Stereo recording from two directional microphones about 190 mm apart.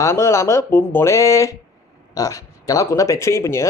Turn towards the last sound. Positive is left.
turn(degrees=15)  # may be behind; listen again after turning